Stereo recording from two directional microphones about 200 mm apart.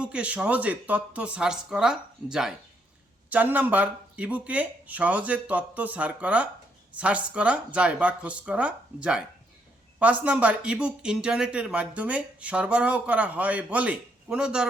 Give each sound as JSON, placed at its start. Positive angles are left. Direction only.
{"t": 0.0, "sound": "a man's voice", "side_deg": -5}